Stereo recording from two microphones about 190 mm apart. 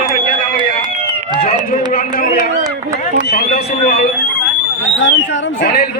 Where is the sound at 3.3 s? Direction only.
55° left (ahead or behind).